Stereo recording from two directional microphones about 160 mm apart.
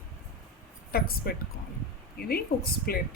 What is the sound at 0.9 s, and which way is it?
A woman's voice, 70° left (ahead or behind).